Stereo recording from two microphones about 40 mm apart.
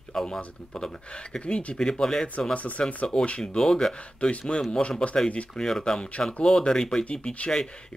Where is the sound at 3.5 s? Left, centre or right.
Centre.